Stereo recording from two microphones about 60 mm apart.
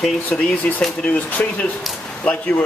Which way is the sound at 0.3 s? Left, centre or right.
Centre.